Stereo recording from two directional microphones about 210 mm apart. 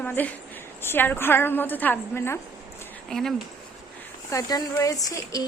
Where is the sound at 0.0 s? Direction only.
5° left (ahead or behind).